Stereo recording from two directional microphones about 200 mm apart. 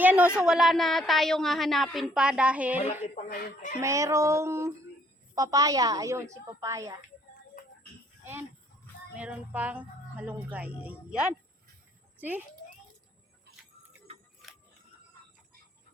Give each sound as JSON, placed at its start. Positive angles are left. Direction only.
{"t": 0.0, "sound": "a sound", "side_deg": -10}
{"t": 0.3, "sound": "a woman's voice", "side_deg": -5}
{"t": 2.8, "sound": "speech", "side_deg": 35}
{"t": 3.2, "sound": "speech", "side_deg": 50}
{"t": 3.8, "sound": "speech", "side_deg": -15}
{"t": 7.6, "sound": "music", "side_deg": 40}
{"t": 8.2, "sound": "speech", "side_deg": -10}
{"t": 14.4, "sound": "music", "side_deg": 0}